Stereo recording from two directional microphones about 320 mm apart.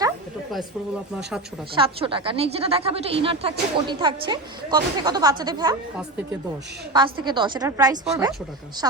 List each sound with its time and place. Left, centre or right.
1.7 s speech: centre